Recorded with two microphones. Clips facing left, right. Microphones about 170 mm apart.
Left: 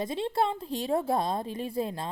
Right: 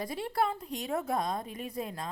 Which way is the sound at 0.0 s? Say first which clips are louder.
Left 3 dB; 25° left (ahead or behind).